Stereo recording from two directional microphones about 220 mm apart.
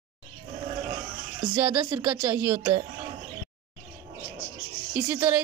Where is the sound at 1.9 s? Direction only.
10° right (ahead or behind).